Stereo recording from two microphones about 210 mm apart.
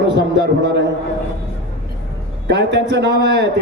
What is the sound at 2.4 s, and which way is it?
A man's voice, 55° right (ahead or behind).